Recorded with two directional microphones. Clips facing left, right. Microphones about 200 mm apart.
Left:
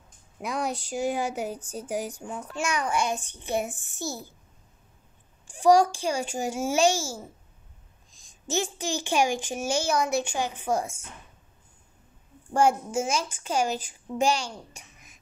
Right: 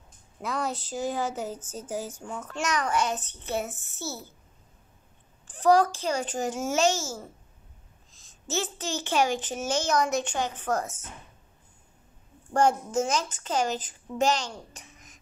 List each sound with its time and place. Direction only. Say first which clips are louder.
0.4 s speech: left 1 dB; 15° left (ahead or behind)
5.5 s speech: left 2 dB; 10° left (ahead or behind)
12.5 s speech: even; 10° left (ahead or behind)